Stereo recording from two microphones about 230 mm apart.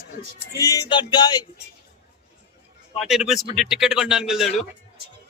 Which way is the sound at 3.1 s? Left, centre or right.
Centre.